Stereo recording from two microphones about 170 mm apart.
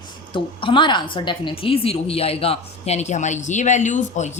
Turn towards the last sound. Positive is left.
turn(degrees=45)  # may be behind; listen again after turning